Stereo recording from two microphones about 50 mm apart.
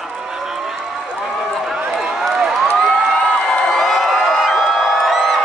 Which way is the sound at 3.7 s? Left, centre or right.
Centre.